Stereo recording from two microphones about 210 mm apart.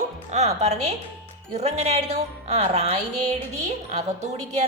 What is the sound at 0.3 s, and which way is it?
A woman's voice, 30° right (ahead or behind).